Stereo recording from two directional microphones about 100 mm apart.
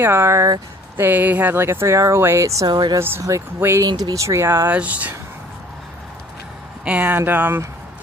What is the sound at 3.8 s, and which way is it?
Speech, 40° right (ahead or behind).